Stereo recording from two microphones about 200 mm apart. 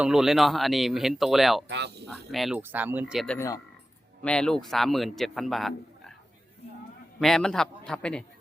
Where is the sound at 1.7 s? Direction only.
60° right (ahead or behind).